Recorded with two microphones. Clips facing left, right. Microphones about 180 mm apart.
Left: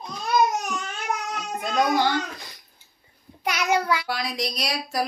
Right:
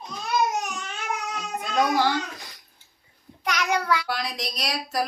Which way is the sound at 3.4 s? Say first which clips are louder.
Left 2 dB; 10° left (ahead or behind).